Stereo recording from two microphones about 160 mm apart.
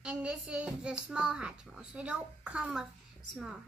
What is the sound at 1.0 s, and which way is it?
Child singing, 5° right (ahead or behind).